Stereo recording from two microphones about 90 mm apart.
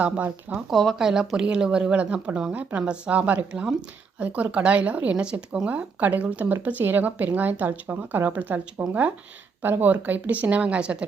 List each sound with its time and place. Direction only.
0.0 s a woman's voice: 15° right (ahead or behind)
0.7 s a woman's voice: centre (ahead or behind)